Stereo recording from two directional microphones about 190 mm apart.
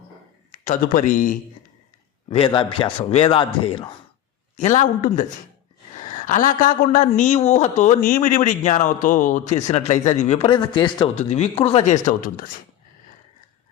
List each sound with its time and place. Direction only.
0.5 s speech: 40° left (ahead or behind)
2.3 s a man's voice: 25° left (ahead or behind)
4.5 s a man's voice: 40° left (ahead or behind)